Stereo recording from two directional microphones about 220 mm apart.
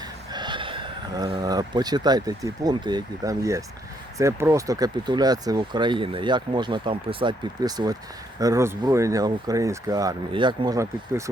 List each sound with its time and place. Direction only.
0.0 s speech: 20° right (ahead or behind)